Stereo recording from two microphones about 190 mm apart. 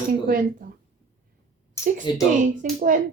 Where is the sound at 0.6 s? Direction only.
45° right (ahead or behind).